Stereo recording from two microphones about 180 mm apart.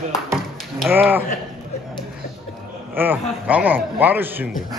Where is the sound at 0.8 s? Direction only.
10° right (ahead or behind).